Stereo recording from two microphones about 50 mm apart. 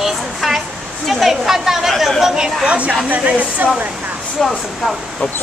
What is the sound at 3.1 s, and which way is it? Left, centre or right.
Speech, right.